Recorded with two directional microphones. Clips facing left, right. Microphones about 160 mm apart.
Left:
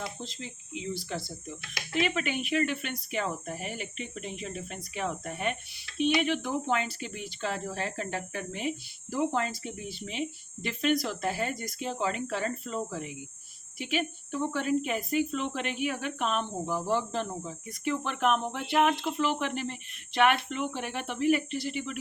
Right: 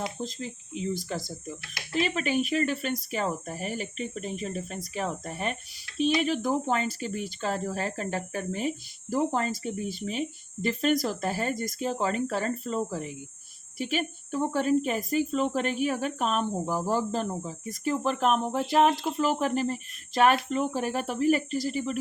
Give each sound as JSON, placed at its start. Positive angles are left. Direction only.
{"t": 0.3, "sound": "speech", "side_deg": -45}